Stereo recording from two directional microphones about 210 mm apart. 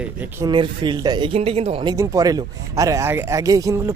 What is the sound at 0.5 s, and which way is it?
Speech, 20° right (ahead or behind).